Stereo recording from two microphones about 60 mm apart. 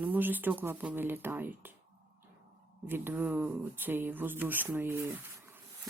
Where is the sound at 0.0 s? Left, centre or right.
Right.